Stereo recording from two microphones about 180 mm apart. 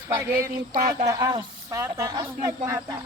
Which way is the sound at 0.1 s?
15° right (ahead or behind).